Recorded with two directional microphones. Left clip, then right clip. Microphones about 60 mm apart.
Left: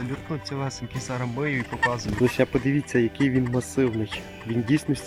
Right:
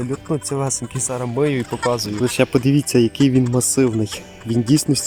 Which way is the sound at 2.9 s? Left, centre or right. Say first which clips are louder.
Right 6 dB; right.